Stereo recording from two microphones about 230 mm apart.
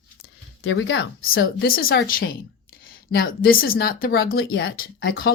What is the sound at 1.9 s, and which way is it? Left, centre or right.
Speech, left.